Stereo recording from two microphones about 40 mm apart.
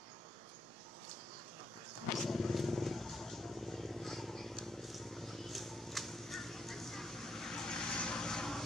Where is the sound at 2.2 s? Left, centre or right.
Centre.